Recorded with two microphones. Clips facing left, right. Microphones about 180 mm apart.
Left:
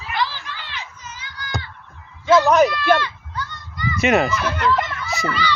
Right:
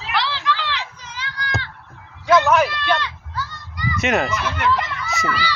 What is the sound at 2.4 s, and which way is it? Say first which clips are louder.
Speech: left 3 dB; 40° left (ahead or behind).